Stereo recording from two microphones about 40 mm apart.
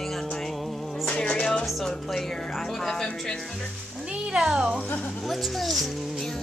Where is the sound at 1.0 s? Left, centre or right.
Left.